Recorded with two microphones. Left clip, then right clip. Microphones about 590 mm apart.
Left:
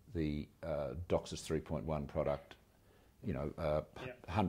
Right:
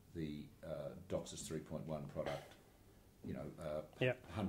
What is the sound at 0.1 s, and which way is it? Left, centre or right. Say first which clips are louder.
Speech: left 8 dB; left.